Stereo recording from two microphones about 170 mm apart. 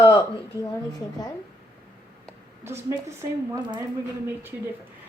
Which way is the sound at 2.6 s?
15° right (ahead or behind).